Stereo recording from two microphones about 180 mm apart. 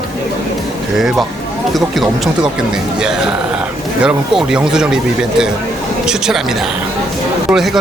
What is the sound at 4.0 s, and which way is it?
Speech, 5° right (ahead or behind).